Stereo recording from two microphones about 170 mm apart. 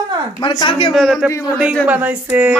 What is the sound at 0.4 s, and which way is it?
Speech, 25° left (ahead or behind).